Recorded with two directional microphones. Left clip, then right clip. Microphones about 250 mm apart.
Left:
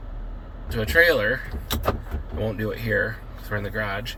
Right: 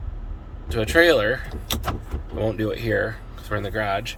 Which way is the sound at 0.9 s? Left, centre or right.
Centre.